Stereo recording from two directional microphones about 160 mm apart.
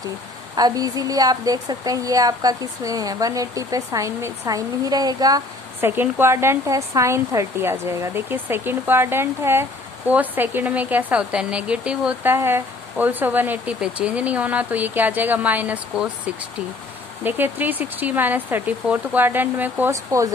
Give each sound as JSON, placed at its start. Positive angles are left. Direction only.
{"t": 0.5, "sound": "a woman's voice", "side_deg": -25}
{"t": 5.8, "sound": "speech", "side_deg": -15}